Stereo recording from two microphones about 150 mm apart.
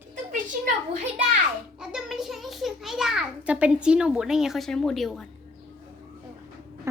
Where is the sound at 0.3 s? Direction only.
60° right (ahead or behind).